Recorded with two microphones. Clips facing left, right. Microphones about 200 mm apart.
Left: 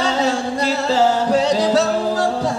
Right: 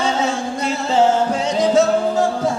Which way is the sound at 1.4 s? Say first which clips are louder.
Right 1 dB; 35° left (ahead or behind).